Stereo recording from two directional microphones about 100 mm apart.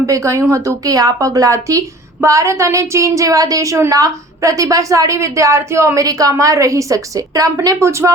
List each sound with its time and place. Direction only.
0.1 s a woman's voice: 30° right (ahead or behind)